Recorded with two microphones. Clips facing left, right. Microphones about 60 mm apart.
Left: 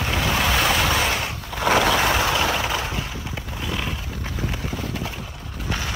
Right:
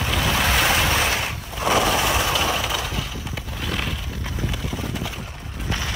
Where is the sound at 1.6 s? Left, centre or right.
Left.